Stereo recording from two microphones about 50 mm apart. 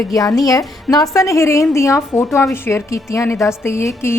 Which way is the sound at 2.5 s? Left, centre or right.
Left.